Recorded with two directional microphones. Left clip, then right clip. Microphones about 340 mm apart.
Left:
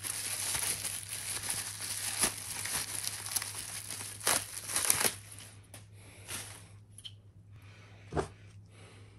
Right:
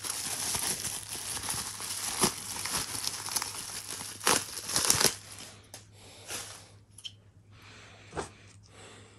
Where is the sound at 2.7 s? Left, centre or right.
Centre.